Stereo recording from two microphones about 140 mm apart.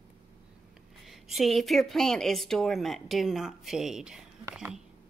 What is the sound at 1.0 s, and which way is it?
Speech, centre (ahead or behind).